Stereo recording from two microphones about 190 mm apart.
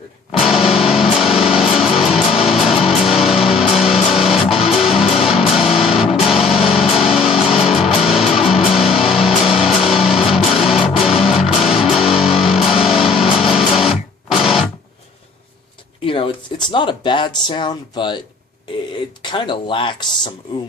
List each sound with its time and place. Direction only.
0.3 s music: centre (ahead or behind)
16.0 s speech: 25° left (ahead or behind)
19.2 s speech: 25° left (ahead or behind)